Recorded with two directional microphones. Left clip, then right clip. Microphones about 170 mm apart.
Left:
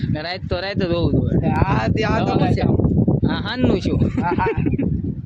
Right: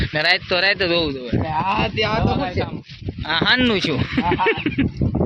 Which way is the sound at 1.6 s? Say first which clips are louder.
Right 1 dB; 35° right (ahead or behind).